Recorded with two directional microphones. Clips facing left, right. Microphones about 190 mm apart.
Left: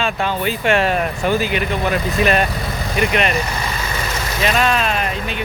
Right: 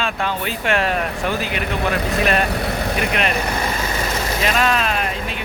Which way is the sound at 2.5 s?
65° right (ahead or behind).